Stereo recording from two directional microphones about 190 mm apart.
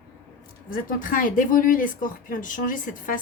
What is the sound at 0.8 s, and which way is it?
Speech, 45° left (ahead or behind).